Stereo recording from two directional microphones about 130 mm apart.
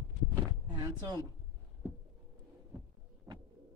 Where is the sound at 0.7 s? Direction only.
35° right (ahead or behind).